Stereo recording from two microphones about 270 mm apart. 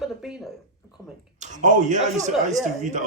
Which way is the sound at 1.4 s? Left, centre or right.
Right.